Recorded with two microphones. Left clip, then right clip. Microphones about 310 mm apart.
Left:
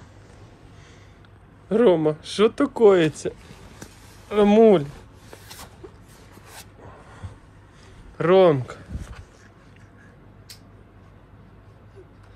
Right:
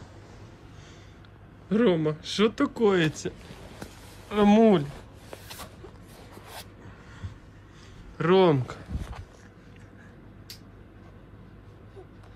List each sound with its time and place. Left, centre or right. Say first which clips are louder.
1.7 s speech: left 6 dB; centre
8.2 s speech: left 5 dB; centre